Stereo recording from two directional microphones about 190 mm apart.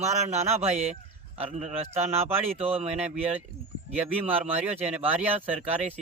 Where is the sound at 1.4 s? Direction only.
35° right (ahead or behind).